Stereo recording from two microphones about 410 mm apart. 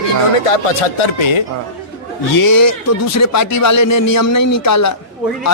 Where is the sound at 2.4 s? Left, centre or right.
Left.